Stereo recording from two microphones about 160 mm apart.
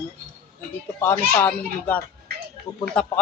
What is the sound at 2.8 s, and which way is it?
Speech, 5° left (ahead or behind).